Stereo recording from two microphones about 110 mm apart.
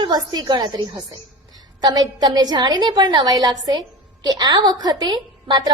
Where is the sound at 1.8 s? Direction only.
40° right (ahead or behind).